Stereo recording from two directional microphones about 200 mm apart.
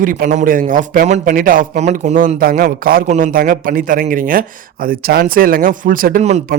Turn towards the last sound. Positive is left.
turn(degrees=-35)  # may be behind; listen again after turning